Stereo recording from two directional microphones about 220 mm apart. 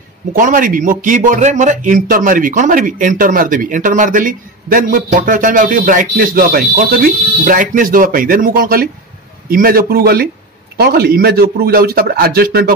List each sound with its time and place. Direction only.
0.4 s a man's voice: 40° right (ahead or behind)